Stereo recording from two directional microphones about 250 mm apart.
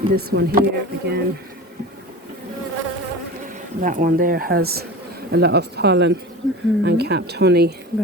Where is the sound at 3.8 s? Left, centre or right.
Right.